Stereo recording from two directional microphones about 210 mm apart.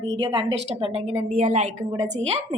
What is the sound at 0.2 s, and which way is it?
A woman's voice, 20° right (ahead or behind).